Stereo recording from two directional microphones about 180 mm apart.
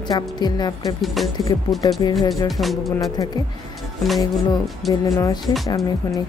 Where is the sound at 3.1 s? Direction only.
20° left (ahead or behind).